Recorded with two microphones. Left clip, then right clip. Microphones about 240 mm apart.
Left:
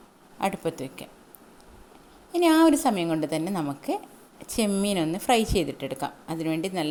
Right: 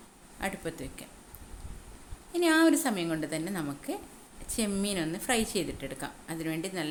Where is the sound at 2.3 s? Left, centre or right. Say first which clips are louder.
Left 5 dB; left.